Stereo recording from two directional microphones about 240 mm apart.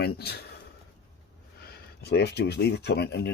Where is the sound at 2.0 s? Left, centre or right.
Left.